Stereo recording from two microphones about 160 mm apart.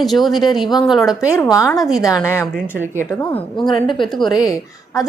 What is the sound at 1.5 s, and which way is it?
Speech, 20° left (ahead or behind).